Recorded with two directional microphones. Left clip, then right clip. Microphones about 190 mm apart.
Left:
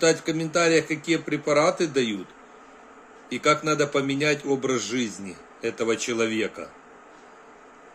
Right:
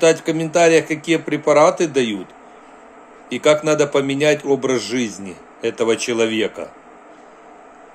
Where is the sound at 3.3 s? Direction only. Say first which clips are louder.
Right 7 dB; 15° left (ahead or behind).